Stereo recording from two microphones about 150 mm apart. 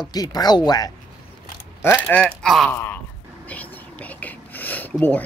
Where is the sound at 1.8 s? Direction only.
10° left (ahead or behind).